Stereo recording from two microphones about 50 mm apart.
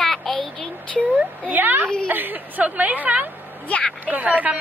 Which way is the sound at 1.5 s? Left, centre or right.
Right.